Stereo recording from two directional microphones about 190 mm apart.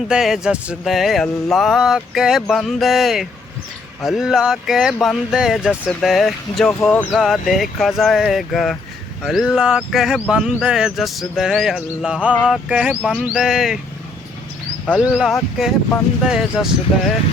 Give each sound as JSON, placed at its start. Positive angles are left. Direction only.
{"t": 0.1, "sound": "speech", "side_deg": -5}
{"t": 14.8, "sound": "speech", "side_deg": 0}